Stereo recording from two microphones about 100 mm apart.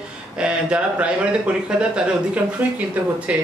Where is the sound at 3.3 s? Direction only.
15° right (ahead or behind).